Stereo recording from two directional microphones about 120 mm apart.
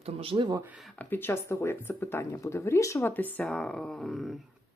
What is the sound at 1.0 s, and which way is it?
Speech, 15° left (ahead or behind).